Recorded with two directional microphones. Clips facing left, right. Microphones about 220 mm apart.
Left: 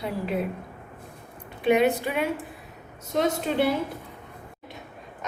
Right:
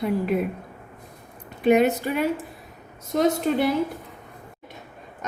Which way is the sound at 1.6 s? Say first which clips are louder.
Right 3 dB; 45° right (ahead or behind).